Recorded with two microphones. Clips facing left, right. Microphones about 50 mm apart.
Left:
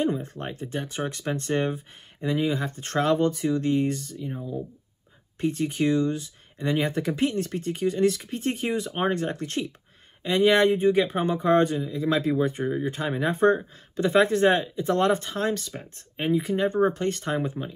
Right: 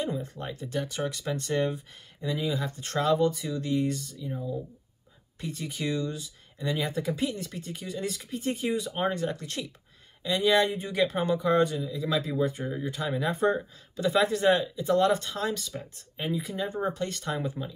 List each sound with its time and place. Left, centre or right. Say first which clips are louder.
0.0 s speech: left 5 dB; left
5.4 s speech: left 9 dB; left
11.3 s speech: left 4 dB; left